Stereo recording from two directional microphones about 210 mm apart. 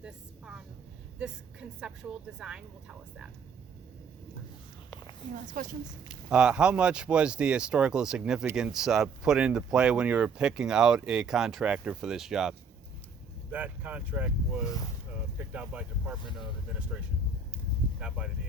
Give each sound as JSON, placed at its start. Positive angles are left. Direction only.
{"t": 0.0, "sound": "speech", "side_deg": -5}
{"t": 5.6, "sound": "a woman's voice", "side_deg": -40}
{"t": 6.3, "sound": "speech", "side_deg": -5}